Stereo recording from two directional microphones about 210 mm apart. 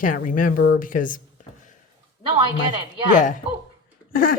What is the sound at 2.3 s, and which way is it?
Speech, 25° right (ahead or behind).